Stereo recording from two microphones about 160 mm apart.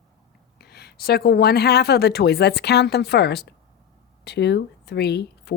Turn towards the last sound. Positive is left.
turn(degrees=90)